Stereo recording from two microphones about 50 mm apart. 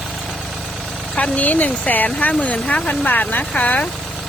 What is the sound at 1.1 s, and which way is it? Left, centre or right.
Speech, left.